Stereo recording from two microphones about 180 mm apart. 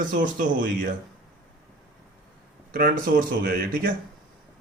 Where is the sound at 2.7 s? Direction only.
55° right (ahead or behind).